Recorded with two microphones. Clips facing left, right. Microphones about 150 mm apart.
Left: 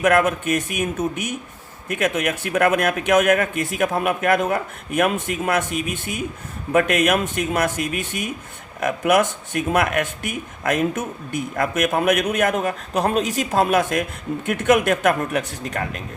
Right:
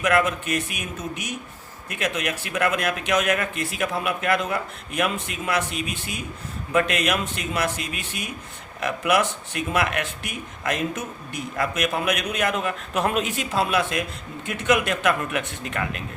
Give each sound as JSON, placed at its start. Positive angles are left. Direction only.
{"t": 0.0, "sound": "a man's voice", "side_deg": 50}